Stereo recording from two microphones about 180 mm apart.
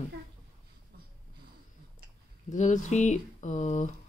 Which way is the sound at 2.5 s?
40° left (ahead or behind).